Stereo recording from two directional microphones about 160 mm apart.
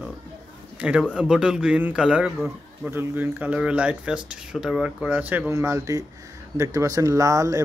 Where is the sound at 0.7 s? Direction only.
5° right (ahead or behind).